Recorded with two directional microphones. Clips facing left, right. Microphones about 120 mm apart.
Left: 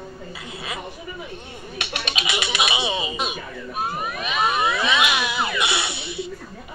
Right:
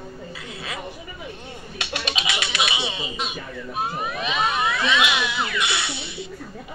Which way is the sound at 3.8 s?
25° right (ahead or behind).